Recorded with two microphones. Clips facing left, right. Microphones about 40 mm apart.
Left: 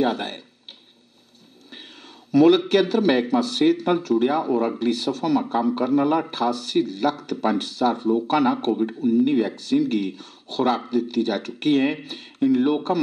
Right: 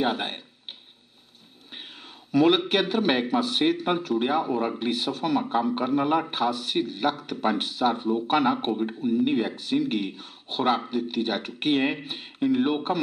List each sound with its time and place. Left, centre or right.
0.0 s speech: right
2.3 s speech: right